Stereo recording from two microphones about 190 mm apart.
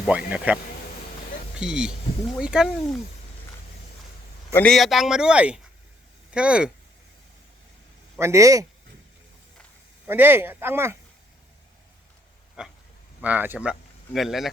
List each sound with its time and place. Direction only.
0.1 s speech: 5° right (ahead or behind)
4.5 s speech: 5° left (ahead or behind)
8.2 s speech: 15° right (ahead or behind)
10.1 s speech: 10° right (ahead or behind)
12.6 s a sound: 5° right (ahead or behind)
13.2 s speech: 10° right (ahead or behind)